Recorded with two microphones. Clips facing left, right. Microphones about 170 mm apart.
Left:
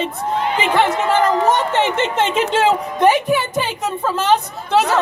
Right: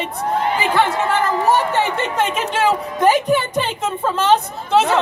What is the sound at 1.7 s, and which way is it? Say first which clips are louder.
A woman's voice: left 2 dB; 20° left (ahead or behind).